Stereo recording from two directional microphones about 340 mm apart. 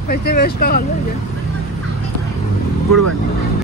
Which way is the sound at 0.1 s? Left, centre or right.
Left.